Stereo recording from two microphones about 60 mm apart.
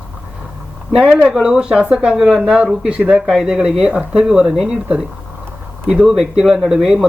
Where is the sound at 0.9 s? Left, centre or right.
Centre.